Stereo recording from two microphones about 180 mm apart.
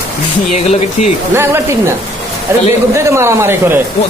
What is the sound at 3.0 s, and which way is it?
Speech, 15° right (ahead or behind).